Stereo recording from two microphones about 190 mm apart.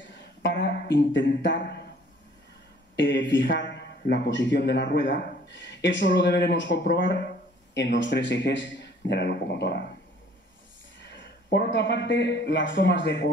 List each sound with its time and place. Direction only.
0.1 s a sound: 70° left (ahead or behind)
0.8 s a man's voice: 70° left (ahead or behind)
3.0 s a man's voice: 70° left (ahead or behind)
11.0 s speech: 70° left (ahead or behind)